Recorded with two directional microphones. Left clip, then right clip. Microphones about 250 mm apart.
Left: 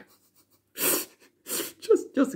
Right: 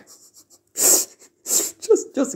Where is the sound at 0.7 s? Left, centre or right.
Centre.